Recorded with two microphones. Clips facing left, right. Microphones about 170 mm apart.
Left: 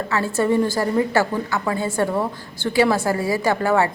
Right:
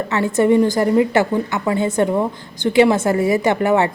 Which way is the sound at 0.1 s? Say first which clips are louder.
Right 5 dB; 20° right (ahead or behind).